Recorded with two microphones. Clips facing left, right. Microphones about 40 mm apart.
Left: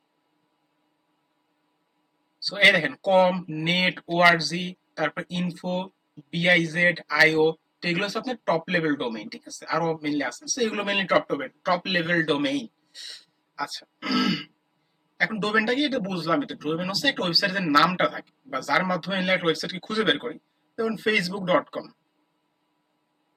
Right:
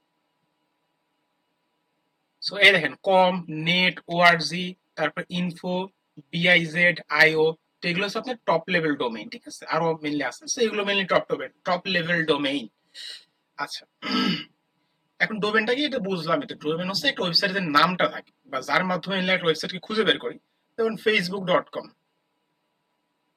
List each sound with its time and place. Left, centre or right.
2.4 s speech: centre
12.2 s speech: centre
13.6 s speech: centre